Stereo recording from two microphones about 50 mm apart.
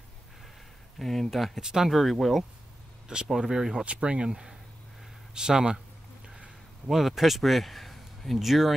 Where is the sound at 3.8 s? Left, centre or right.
Right.